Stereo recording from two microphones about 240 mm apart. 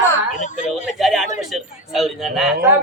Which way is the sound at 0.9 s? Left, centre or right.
Centre.